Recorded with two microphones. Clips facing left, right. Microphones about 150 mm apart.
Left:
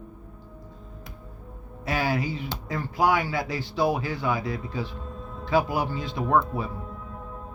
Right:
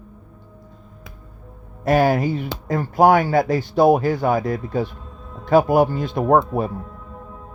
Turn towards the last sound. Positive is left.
turn(degrees=-50)  # may be behind; listen again after turning